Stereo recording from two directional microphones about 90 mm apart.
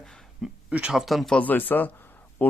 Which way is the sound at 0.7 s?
15° right (ahead or behind).